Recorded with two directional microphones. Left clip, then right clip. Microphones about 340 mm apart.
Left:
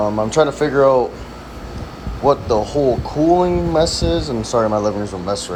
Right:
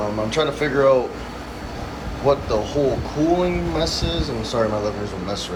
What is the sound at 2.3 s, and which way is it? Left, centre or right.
A man's voice, centre.